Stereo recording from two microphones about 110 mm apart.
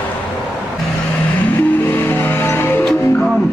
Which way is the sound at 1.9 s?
20° left (ahead or behind).